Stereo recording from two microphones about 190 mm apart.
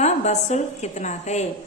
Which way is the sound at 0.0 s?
35° left (ahead or behind).